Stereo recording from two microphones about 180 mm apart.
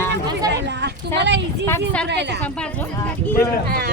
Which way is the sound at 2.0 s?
70° right (ahead or behind).